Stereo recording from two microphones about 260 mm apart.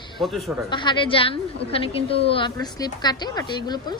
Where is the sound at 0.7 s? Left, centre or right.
Centre.